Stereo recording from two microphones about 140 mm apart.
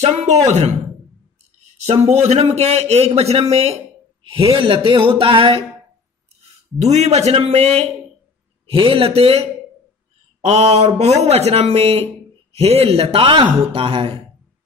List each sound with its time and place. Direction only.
0.0 s speech: 50° right (ahead or behind)
1.9 s a man's voice: 50° right (ahead or behind)
6.8 s a man's voice: 55° right (ahead or behind)